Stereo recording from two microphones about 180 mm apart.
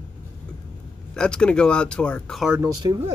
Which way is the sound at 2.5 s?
20° right (ahead or behind).